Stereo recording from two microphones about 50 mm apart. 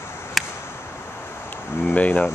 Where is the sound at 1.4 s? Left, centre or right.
Left.